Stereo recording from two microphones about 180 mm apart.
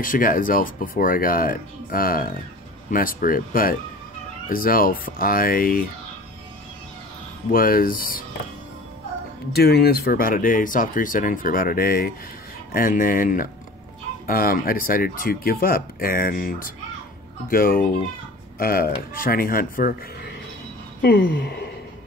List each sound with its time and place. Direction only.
0.0 s speech: 50° left (ahead or behind)
7.5 s speech: 55° left (ahead or behind)
9.5 s speech: 60° left (ahead or behind)
21.0 s a sound: 55° left (ahead or behind)